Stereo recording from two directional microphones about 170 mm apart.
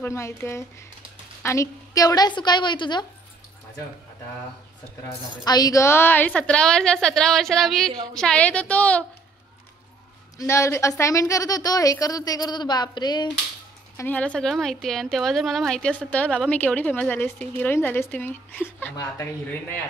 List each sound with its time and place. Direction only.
0.0 s a woman's voice: 15° left (ahead or behind)
5.4 s a woman's voice: 25° left (ahead or behind); by 9.0 s 10° left (ahead or behind)
10.3 s a woman's voice: 15° left (ahead or behind)
13.9 s a woman's voice: 10° left (ahead or behind)